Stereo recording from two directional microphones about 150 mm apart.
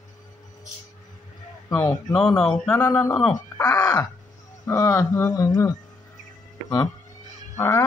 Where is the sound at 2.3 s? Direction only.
5° left (ahead or behind).